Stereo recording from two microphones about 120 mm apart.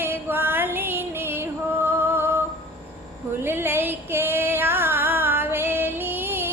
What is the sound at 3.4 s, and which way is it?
Female singing, 20° right (ahead or behind).